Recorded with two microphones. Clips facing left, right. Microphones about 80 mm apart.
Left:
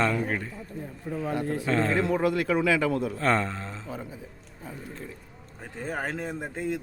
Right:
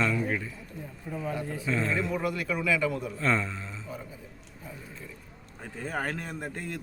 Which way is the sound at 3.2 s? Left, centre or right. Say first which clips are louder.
Left 3 dB; left.